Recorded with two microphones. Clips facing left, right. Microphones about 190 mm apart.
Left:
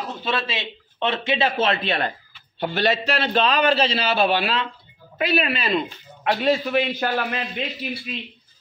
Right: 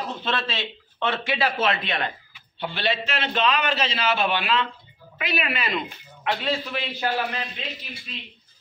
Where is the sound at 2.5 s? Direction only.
45° left (ahead or behind).